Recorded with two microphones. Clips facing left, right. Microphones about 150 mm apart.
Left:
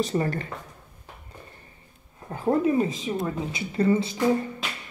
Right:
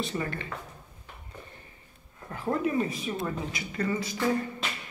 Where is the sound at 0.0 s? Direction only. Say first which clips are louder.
Left 7 dB; 40° left (ahead or behind).